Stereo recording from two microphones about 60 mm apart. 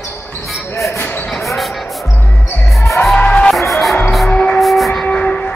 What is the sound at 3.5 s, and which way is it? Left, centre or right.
Music, centre.